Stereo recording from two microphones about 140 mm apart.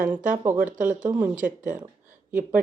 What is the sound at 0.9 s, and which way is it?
Speech, 10° right (ahead or behind).